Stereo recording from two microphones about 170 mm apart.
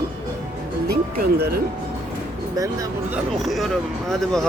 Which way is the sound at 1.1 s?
65° right (ahead or behind).